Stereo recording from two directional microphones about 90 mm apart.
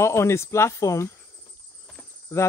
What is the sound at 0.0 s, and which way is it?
Speech, 30° left (ahead or behind).